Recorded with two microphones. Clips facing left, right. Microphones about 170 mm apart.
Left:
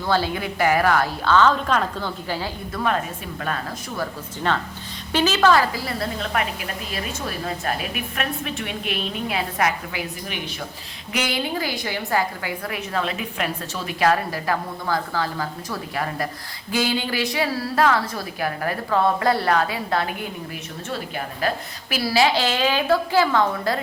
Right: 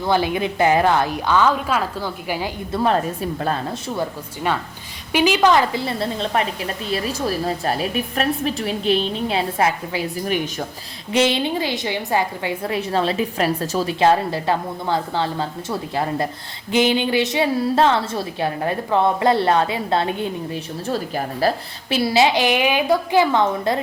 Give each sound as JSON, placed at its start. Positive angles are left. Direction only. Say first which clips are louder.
{"t": 0.0, "sound": "speech", "louder": "right 3 dB", "side_deg": -15}
{"t": 2.7, "sound": "a woman's voice", "louder": "right 5 dB", "side_deg": -30}
{"t": 5.1, "sound": "a woman's voice", "louder": "right 2 dB", "side_deg": -15}
{"t": 11.1, "sound": "a woman's voice", "louder": "right 7 dB", "side_deg": -25}